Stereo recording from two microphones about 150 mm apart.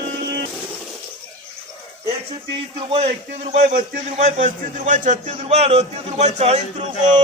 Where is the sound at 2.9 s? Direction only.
50° right (ahead or behind).